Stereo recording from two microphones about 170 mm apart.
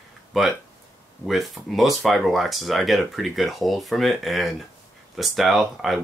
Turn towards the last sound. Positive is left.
turn(degrees=0)  # may be behind; listen again after turning